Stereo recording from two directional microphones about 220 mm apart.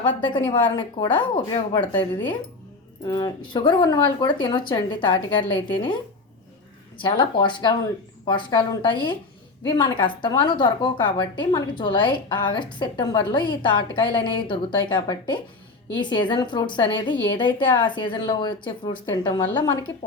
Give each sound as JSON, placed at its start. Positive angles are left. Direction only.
{"t": 0.2, "sound": "a woman's voice", "side_deg": 20}
{"t": 1.8, "sound": "a woman's voice", "side_deg": 10}
{"t": 3.1, "sound": "a woman's voice", "side_deg": 20}
{"t": 7.0, "sound": "a woman's voice", "side_deg": 20}